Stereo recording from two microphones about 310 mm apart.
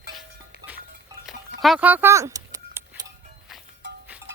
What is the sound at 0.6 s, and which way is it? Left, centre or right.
Music, centre.